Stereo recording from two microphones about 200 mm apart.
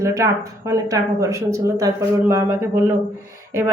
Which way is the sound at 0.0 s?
15° right (ahead or behind).